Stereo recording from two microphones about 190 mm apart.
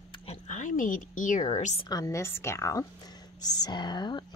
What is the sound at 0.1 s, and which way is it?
Speech, 35° left (ahead or behind).